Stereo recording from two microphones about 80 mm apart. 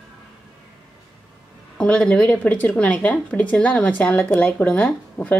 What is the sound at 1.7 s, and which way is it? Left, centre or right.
A woman's voice, centre.